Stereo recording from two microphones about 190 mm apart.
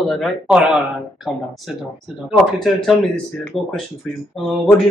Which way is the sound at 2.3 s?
Centre (ahead or behind).